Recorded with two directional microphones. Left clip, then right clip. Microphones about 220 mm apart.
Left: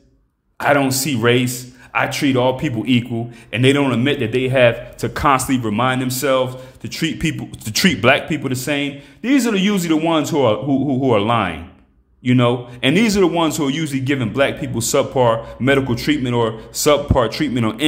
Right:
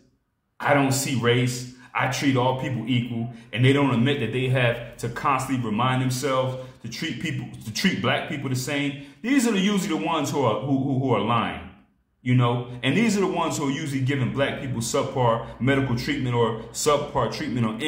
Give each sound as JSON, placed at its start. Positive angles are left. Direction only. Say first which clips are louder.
{"t": 0.6, "sound": "a man's voice", "louder": "left 6 dB", "side_deg": 45}